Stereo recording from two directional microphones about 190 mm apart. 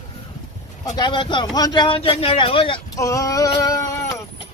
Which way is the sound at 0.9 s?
25° left (ahead or behind).